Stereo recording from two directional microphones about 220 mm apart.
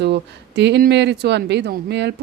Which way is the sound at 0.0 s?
50° right (ahead or behind).